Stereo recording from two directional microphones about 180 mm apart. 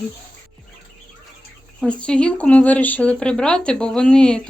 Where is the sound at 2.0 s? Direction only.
5° left (ahead or behind).